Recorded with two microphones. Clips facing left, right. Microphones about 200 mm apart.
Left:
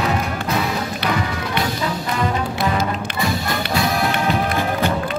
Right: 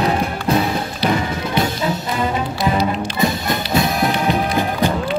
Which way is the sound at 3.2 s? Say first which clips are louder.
Right 2 dB; 20° right (ahead or behind).